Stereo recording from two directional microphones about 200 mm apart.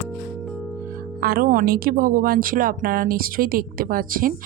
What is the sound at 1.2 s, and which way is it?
Speech, 45° right (ahead or behind).